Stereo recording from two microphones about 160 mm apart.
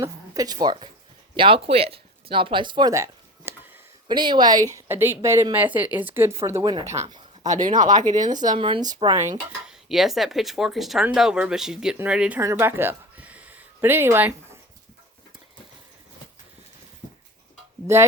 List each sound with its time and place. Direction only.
0.0 s a woman's voice: 25° right (ahead or behind)
7.4 s speech: 50° right (ahead or behind)
8.1 s speech: 15° left (ahead or behind)
8.5 s a woman's voice: 35° right (ahead or behind); by 9.4 s 15° right (ahead or behind)
9.6 s a woman's voice: centre (ahead or behind)